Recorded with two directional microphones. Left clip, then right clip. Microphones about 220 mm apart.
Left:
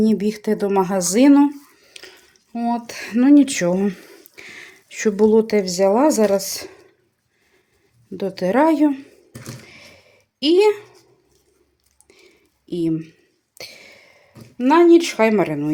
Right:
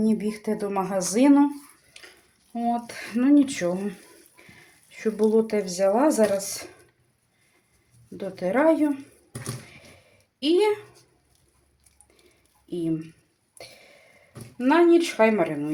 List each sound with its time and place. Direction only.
0.0 s speech: 45° left (ahead or behind)
2.5 s speech: 45° left (ahead or behind)
8.1 s speech: 45° left (ahead or behind)
10.4 s speech: 45° left (ahead or behind)
12.6 s speech: 50° left (ahead or behind)
13.6 s a sound: 45° left (ahead or behind)
14.6 s speech: 45° left (ahead or behind)